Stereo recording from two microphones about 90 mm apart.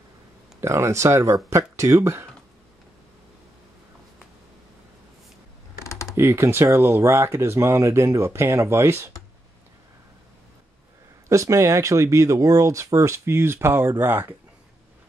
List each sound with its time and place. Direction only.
0.6 s speech: 30° right (ahead or behind)
5.9 s typing: 35° left (ahead or behind)
6.1 s speech: 30° right (ahead or behind)
11.2 s speech: 35° right (ahead or behind)